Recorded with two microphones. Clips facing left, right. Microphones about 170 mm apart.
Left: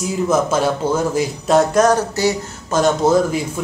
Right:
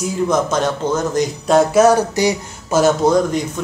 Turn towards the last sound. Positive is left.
turn(degrees=5)  # may be behind; listen again after turning